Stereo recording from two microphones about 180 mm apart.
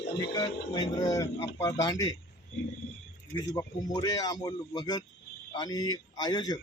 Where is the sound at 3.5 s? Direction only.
20° left (ahead or behind).